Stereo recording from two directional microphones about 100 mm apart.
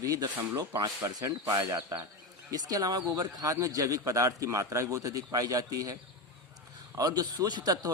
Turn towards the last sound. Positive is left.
turn(degrees=-40)  # may be behind; listen again after turning